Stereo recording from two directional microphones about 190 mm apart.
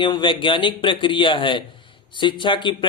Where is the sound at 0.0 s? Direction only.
25° left (ahead or behind).